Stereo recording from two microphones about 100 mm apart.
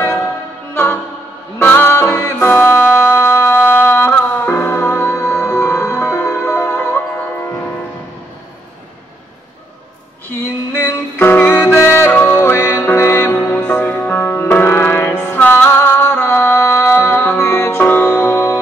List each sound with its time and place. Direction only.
1.6 s music: 20° left (ahead or behind)
10.4 s music: 20° left (ahead or behind)